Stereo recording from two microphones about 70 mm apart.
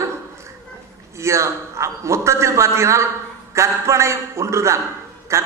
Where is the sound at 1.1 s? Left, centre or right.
Right.